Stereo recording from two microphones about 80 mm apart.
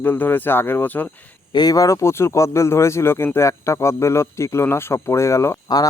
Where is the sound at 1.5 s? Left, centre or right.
Left.